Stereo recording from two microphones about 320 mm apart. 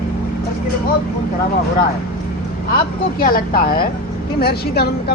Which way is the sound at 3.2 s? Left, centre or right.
Left.